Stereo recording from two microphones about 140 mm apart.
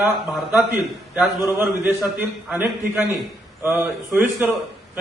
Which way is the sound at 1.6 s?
15° right (ahead or behind).